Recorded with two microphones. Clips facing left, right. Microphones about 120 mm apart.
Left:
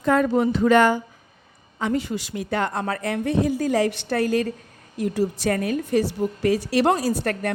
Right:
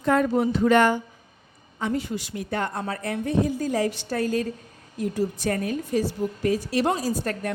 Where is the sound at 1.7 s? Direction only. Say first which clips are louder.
Left 3 dB; 90° left; by 4.5 s 75° left (ahead or behind).